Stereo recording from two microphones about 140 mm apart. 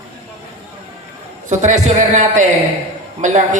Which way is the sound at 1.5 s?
55° right (ahead or behind).